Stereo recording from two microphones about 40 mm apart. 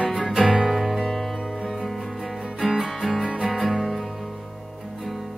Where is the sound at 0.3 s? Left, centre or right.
Centre.